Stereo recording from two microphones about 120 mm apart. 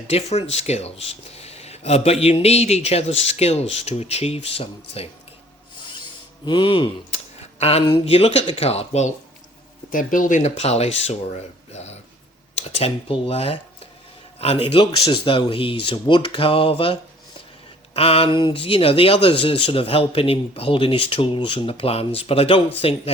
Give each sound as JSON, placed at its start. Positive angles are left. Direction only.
{"t": 0.1, "sound": "speech", "side_deg": 60}
{"t": 6.4, "sound": "speech", "side_deg": 40}
{"t": 7.6, "sound": "speech", "side_deg": 55}
{"t": 9.9, "sound": "speech", "side_deg": 90}
{"t": 11.7, "sound": "a sound", "side_deg": 65}
{"t": 12.5, "sound": "speech", "side_deg": 55}